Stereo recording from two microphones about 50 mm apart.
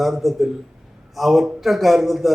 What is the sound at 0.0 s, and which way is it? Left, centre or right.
A man's voice, centre.